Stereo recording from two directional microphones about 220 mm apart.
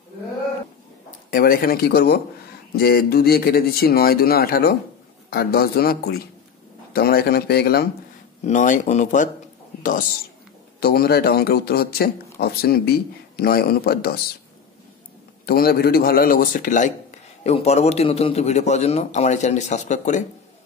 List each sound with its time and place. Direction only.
1.3 s speech: 40° left (ahead or behind)
8.5 s a man's voice: 35° left (ahead or behind)
10.8 s speech: 45° left (ahead or behind)
15.4 s a man's voice: 45° left (ahead or behind)